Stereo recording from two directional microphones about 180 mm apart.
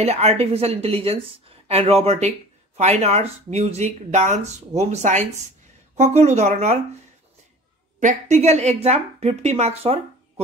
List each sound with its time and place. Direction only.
0.0 s speech: 35° right (ahead or behind)
8.0 s speech: 40° right (ahead or behind)